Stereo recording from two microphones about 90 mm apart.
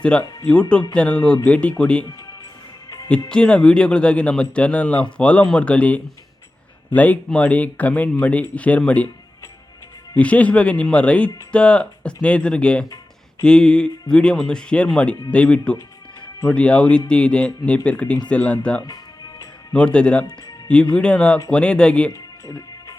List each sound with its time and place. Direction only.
0.0 s speech: 10° left (ahead or behind)
2.0 s music: 40° left (ahead or behind)
3.1 s speech: 10° left (ahead or behind)
10.2 s speech: 15° left (ahead or behind)
22.1 s music: 40° left (ahead or behind)